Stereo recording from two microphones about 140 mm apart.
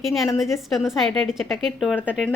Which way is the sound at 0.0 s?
Centre (ahead or behind).